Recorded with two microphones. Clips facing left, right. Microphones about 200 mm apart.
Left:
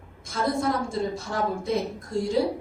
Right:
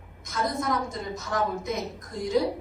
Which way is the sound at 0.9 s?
30° left (ahead or behind).